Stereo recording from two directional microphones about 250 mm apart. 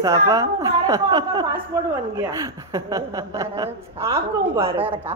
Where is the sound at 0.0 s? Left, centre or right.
Centre.